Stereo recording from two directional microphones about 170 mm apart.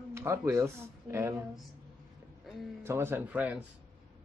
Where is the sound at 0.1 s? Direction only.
15° right (ahead or behind).